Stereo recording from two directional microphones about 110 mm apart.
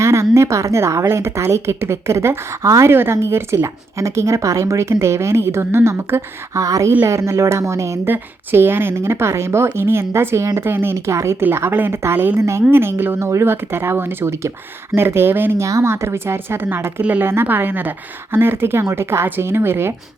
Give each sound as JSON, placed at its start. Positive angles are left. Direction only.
{"t": 0.0, "sound": "a woman's voice", "side_deg": -25}